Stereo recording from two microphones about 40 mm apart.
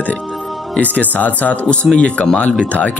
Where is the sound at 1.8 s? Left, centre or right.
Centre.